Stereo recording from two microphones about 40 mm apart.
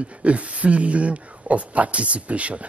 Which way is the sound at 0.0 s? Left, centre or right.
Right.